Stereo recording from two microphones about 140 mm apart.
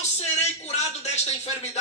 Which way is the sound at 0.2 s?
50° left (ahead or behind).